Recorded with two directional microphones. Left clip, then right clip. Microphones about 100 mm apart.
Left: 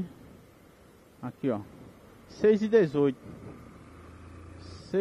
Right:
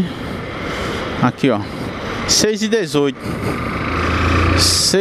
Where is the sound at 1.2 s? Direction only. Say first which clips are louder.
Right 15 dB; 20° right (ahead or behind).